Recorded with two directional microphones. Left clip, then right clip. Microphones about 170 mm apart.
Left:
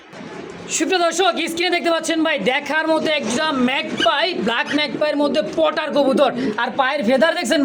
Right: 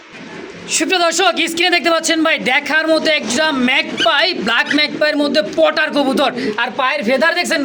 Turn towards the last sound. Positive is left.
turn(degrees=-10)  # may be behind; listen again after turning